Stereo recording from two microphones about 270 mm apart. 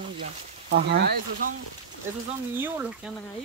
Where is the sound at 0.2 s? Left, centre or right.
Right.